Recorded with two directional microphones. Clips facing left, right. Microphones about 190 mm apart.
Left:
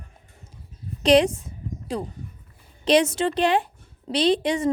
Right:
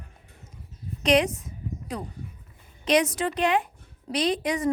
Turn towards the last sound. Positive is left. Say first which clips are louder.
# left 4 dB
turn(degrees=30)  # may be behind; listen again after turning